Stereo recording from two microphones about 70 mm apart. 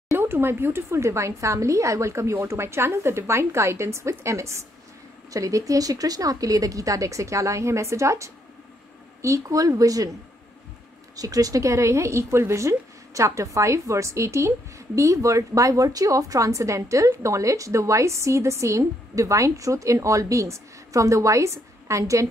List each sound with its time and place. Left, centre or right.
0.1 s a woman's voice: right
11.1 s a woman's voice: right